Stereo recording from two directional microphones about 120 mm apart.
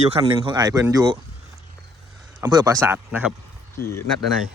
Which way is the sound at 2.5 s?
35° right (ahead or behind).